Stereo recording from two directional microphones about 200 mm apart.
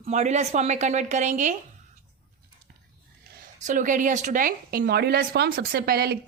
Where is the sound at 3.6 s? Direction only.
40° right (ahead or behind).